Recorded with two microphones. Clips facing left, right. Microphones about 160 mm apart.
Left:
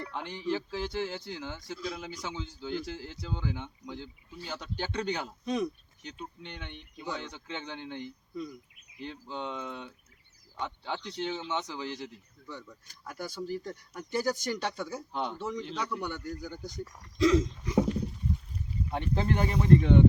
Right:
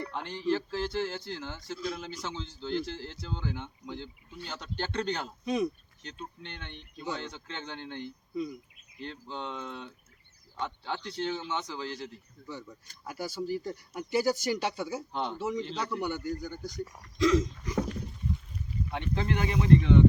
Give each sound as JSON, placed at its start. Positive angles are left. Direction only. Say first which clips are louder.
{"t": 0.1, "sound": "speech", "louder": "right 2 dB", "side_deg": 15}
{"t": 1.7, "sound": "a man's voice", "louder": "right 3 dB", "side_deg": 0}
{"t": 2.0, "sound": "speech", "louder": "even", "side_deg": 10}
{"t": 5.5, "sound": "a man's voice", "louder": "right 2 dB", "side_deg": -5}
{"t": 6.0, "sound": "a man's voice", "louder": "even", "side_deg": 15}
{"t": 11.0, "sound": "speech", "louder": "right 3 dB", "side_deg": 15}
{"t": 13.1, "sound": "speech", "louder": "right 2 dB", "side_deg": -5}
{"t": 15.1, "sound": "a man's voice", "louder": "right 1 dB", "side_deg": 5}
{"t": 17.2, "sound": "a sound", "louder": "left 1 dB", "side_deg": 30}
{"t": 17.6, "sound": "a sound", "louder": "left 5 dB", "side_deg": 20}
{"t": 18.9, "sound": "speech", "louder": "left 2 dB", "side_deg": 40}